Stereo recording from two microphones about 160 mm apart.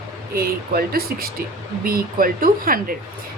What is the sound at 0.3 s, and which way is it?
A woman's voice, 70° right (ahead or behind).